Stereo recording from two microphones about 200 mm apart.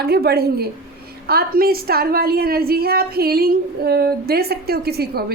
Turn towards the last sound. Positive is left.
turn(degrees=-50)  # may be behind; listen again after turning